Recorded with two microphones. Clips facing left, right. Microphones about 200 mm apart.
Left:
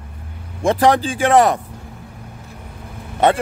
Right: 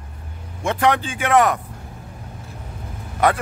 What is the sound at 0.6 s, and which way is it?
Speech, 35° left (ahead or behind).